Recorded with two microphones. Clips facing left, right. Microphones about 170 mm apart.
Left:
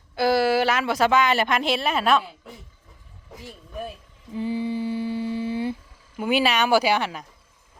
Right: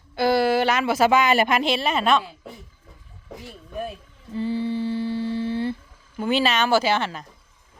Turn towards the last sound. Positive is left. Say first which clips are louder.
# even
turn(degrees=10)  # may be behind; listen again after turning